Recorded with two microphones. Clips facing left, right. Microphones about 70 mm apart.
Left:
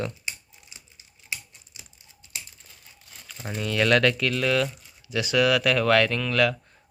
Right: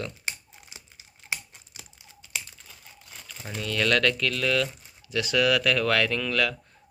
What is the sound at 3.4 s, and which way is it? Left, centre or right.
Speech, centre.